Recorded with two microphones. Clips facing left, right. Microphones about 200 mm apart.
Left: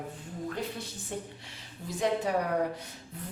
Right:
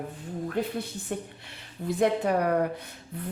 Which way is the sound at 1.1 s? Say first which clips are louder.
Right 3 dB; 60° right (ahead or behind).